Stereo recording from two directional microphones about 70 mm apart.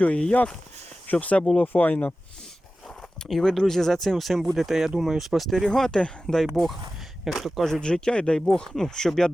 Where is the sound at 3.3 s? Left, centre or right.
Centre.